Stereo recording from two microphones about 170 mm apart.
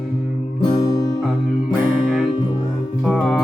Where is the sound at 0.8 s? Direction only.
20° left (ahead or behind).